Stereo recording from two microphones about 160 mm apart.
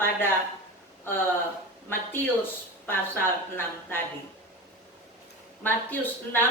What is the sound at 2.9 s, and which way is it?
A woman's voice, 15° left (ahead or behind).